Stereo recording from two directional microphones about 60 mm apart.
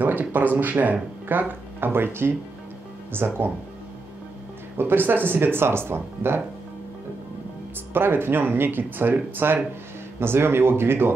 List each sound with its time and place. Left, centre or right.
0.0 s speech: right
4.7 s speech: right
7.9 s speech: right